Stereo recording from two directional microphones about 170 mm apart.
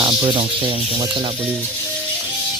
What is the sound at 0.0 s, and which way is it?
Speech, 25° right (ahead or behind).